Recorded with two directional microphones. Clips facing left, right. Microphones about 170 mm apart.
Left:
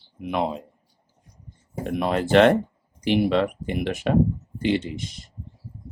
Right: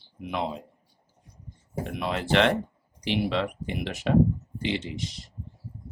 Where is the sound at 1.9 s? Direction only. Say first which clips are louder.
Left 7 dB; 45° left (ahead or behind).